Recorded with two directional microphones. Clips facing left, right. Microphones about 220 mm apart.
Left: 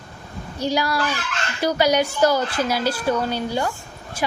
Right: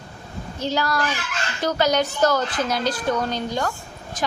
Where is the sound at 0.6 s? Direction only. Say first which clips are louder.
Left 2 dB; 10° left (ahead or behind).